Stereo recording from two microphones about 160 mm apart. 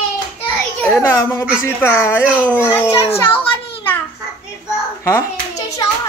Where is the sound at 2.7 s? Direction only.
20° left (ahead or behind).